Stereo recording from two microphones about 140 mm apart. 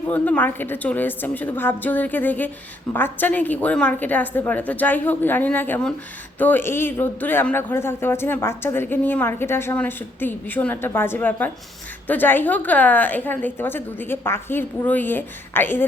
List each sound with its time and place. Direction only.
0.1 s a man's voice: 10° left (ahead or behind)